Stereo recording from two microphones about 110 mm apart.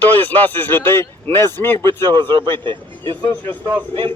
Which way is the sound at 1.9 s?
45° right (ahead or behind).